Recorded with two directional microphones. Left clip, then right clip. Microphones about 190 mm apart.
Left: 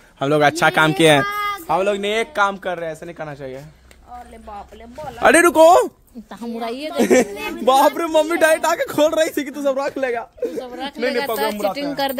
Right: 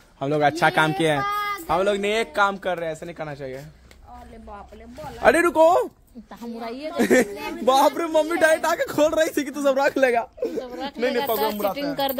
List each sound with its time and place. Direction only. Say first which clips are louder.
0.2 s a man's voice: left 4 dB; 30° left (ahead or behind)
1.2 s speech: left 3 dB; 5° left (ahead or behind)
5.2 s a man's voice: left 5 dB; 35° left (ahead or behind)
6.6 s speech: left 5 dB; 60° left (ahead or behind)
7.0 s speech: left 4 dB; 10° left (ahead or behind)
9.9 s speech: right 3 dB; 50° right (ahead or behind)
10.6 s speech: left 3 dB; 25° left (ahead or behind)
11.1 s speech: left 2 dB; 10° left (ahead or behind)